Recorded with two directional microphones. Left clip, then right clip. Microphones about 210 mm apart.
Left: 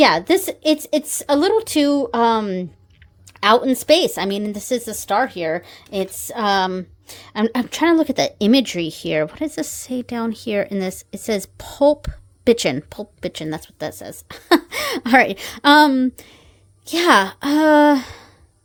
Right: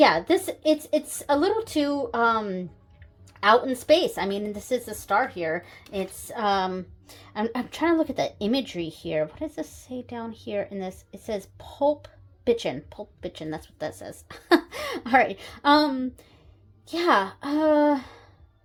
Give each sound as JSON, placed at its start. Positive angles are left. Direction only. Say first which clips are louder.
{"t": 0.0, "sound": "speech", "louder": "left 5 dB", "side_deg": 45}